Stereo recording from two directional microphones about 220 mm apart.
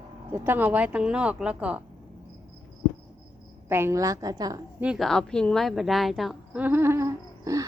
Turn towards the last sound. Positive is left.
turn(degrees=-15)  # may be behind; listen again after turning